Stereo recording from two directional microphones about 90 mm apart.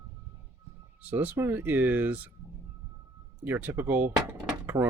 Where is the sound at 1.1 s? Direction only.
15° right (ahead or behind).